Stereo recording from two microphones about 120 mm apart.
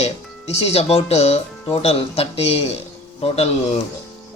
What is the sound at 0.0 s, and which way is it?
Speech, 60° left (ahead or behind).